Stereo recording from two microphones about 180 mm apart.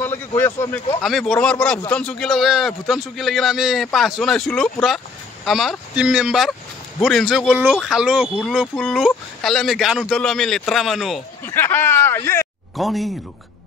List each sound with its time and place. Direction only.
0.4 s speech: 20° left (ahead or behind)
1.0 s speech: centre (ahead or behind)
11.4 s speech: 10° left (ahead or behind)
12.7 s speech: centre (ahead or behind)